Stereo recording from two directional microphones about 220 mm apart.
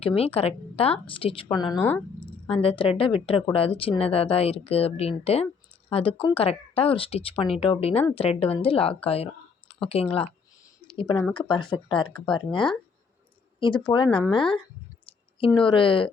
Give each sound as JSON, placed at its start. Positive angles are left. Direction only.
{"t": 0.0, "sound": "a woman's voice", "side_deg": 25}
{"t": 2.2, "sound": "a woman's voice", "side_deg": 25}
{"t": 9.0, "sound": "a sound", "side_deg": 25}
{"t": 9.9, "sound": "a woman's voice", "side_deg": 25}
{"t": 10.8, "sound": "a sound", "side_deg": 25}
{"t": 11.3, "sound": "a woman's voice", "side_deg": 20}